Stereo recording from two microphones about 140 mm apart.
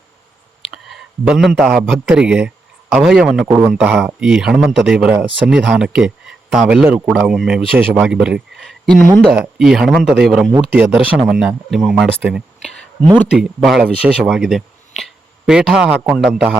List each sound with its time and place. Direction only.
0.7 s a man's voice: 5° right (ahead or behind)